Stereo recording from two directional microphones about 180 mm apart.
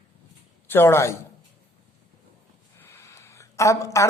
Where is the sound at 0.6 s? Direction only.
15° left (ahead or behind).